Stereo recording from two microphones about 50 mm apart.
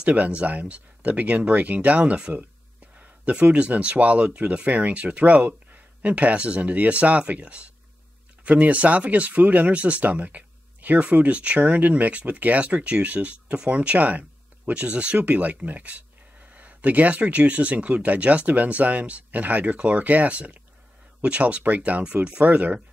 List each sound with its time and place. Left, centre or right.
0.0 s speech: right